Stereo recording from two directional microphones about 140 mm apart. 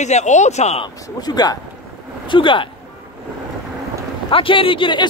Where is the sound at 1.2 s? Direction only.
30° left (ahead or behind).